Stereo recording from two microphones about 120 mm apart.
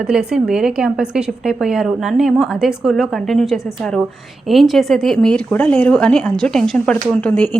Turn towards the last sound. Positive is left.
turn(degrees=10)  # may be behind; listen again after turning